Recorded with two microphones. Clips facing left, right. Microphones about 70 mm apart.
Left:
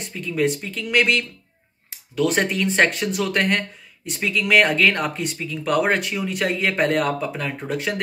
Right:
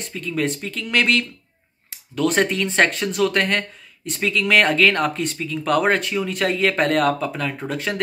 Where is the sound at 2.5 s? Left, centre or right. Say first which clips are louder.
Even; centre.